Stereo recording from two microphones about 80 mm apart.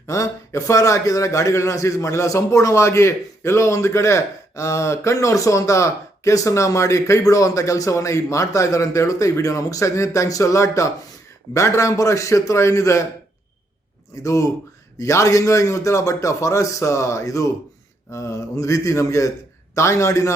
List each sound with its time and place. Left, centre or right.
0.1 s a man's voice: left
14.3 s a man's voice: left